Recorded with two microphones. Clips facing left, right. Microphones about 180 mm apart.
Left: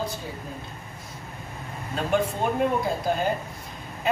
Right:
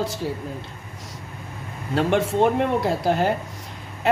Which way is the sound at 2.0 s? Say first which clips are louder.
Right 5 dB; 80° right.